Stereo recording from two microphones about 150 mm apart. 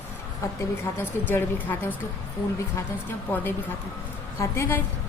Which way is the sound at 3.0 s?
15° left (ahead or behind).